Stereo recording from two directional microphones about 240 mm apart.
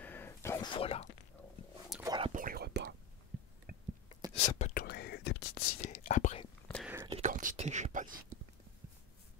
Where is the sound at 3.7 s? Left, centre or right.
Right.